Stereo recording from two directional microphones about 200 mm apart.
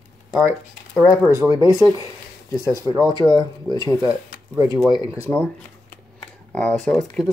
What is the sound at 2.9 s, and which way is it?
Speech, 15° right (ahead or behind).